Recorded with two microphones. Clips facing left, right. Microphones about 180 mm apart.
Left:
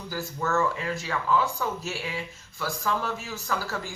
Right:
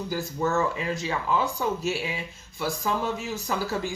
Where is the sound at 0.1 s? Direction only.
20° right (ahead or behind).